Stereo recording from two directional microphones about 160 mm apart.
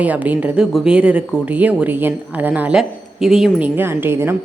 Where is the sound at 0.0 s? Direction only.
10° right (ahead or behind).